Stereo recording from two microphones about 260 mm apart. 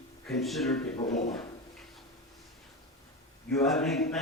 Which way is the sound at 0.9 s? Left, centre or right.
Left.